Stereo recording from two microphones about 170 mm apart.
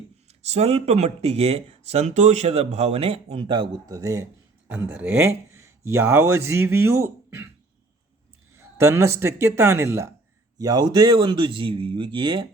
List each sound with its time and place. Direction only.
0.3 s speech: 40° right (ahead or behind); by 7.5 s 15° right (ahead or behind)
8.5 s speech: 15° right (ahead or behind)